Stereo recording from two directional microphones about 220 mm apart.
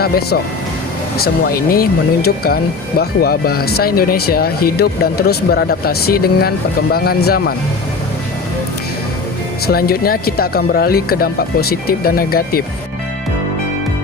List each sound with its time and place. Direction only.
0.0 s speech: 45° left (ahead or behind)
9.6 s speech: 45° left (ahead or behind)